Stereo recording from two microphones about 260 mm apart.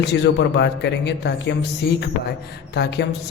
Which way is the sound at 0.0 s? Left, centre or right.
Left.